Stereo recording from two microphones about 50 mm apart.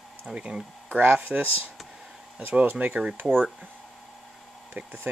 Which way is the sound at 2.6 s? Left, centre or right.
Right.